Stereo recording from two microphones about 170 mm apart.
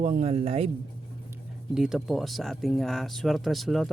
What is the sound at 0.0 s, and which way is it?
Speech, 45° right (ahead or behind).